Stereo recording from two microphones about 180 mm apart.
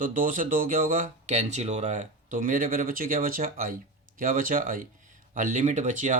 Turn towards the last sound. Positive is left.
turn(degrees=-45)  # may be behind; listen again after turning